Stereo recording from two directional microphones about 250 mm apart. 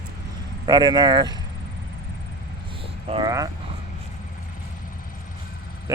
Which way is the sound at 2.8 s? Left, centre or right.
Right.